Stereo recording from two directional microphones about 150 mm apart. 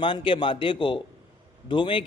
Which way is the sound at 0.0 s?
35° left (ahead or behind).